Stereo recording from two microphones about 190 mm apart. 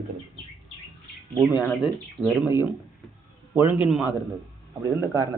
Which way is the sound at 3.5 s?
10° right (ahead or behind).